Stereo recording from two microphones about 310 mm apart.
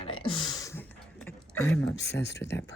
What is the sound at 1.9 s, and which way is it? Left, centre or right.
Speech, left.